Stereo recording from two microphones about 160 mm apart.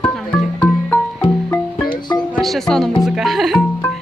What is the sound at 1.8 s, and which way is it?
Music, 25° left (ahead or behind).